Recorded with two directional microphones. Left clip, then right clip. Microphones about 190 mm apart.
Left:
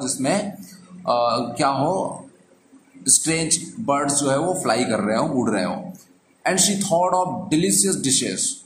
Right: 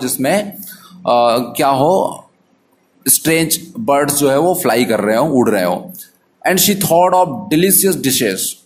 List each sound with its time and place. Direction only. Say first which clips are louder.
0.0 s speech: right 7 dB; 35° right (ahead or behind)
3.1 s speech: right 7 dB; 40° right (ahead or behind)